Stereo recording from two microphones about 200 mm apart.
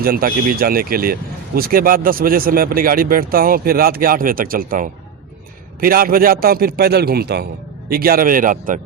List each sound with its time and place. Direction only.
0.0 s speech: 45° right (ahead or behind)